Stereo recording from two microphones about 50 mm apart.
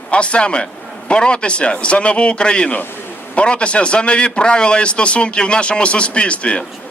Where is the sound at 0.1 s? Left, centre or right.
Left.